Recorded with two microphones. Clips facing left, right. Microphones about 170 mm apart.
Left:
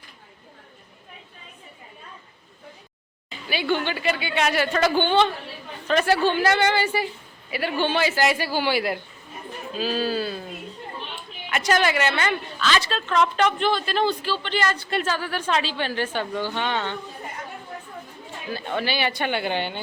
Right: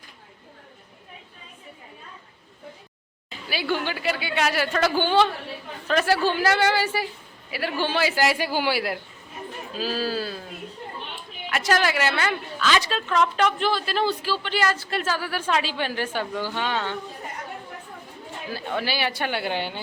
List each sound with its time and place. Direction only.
3.2 s a woman's voice: 5° right (ahead or behind)
11.4 s a woman's voice: centre (ahead or behind)
18.5 s speech: 5° right (ahead or behind)